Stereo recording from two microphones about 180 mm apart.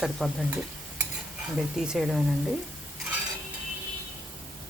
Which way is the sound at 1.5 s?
5° right (ahead or behind).